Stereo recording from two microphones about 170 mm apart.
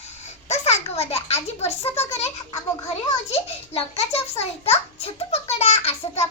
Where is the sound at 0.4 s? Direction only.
40° left (ahead or behind).